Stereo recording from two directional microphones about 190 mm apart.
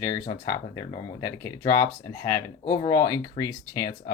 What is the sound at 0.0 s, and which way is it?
Speech, 20° left (ahead or behind).